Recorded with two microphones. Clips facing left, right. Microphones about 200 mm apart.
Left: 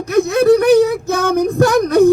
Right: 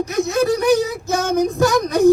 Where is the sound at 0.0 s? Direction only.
60° left (ahead or behind).